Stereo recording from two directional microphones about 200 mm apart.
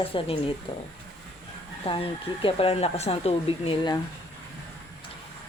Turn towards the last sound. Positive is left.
turn(degrees=25)  # may be behind; listen again after turning